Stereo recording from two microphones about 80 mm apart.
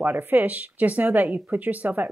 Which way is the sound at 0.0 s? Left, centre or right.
Right.